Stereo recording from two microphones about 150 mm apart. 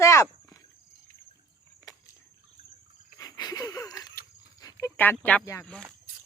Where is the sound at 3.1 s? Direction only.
25° left (ahead or behind).